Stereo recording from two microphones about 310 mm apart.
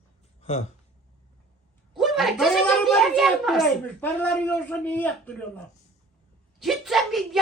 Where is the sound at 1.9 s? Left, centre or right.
Centre.